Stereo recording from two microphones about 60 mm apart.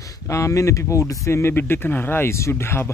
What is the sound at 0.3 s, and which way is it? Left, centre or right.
Speech, left.